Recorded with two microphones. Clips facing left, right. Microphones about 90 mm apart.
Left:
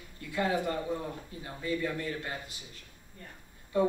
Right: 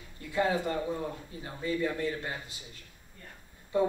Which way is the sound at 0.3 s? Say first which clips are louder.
Right 1 dB; 25° right (ahead or behind).